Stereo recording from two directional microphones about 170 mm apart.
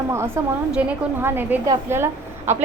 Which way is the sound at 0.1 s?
15° right (ahead or behind).